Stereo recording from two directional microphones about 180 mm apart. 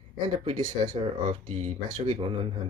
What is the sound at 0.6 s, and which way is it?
Speech, 25° right (ahead or behind).